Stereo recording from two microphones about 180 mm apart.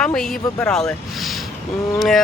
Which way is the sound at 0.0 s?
5° left (ahead or behind).